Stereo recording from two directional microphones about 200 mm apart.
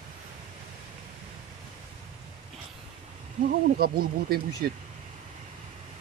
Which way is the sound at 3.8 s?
50° right (ahead or behind).